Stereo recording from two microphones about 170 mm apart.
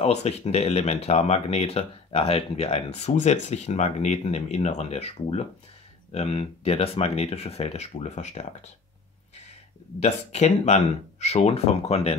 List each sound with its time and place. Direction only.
0.0 s speech: 40° left (ahead or behind)
9.9 s speech: 40° left (ahead or behind)